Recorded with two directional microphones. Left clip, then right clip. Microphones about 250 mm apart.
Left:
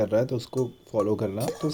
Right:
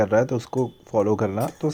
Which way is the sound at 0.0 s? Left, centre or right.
Right.